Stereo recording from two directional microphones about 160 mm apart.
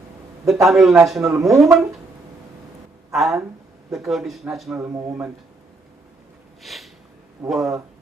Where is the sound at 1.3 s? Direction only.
20° right (ahead or behind).